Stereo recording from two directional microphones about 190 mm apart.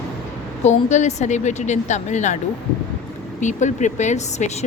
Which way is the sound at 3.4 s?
40° left (ahead or behind).